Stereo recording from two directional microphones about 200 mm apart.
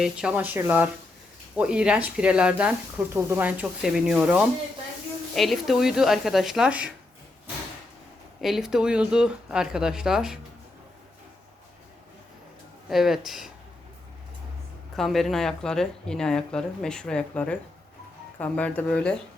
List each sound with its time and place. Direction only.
0.0 s speech: 5° right (ahead or behind)
8.4 s speech: centre (ahead or behind)
12.9 s speech: centre (ahead or behind)
14.9 s speech: centre (ahead or behind)